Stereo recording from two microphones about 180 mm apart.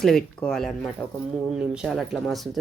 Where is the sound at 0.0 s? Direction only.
5° left (ahead or behind).